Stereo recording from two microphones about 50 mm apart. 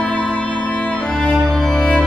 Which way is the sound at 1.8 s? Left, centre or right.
Left.